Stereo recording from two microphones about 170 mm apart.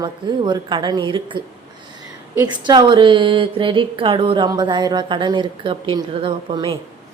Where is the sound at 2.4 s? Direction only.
25° right (ahead or behind).